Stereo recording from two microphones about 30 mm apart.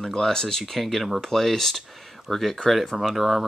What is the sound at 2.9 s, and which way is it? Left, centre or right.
Speech, centre.